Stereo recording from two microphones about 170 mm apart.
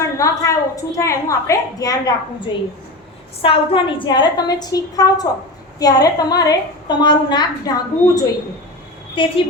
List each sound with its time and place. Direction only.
0.0 s a woman's voice: 20° left (ahead or behind)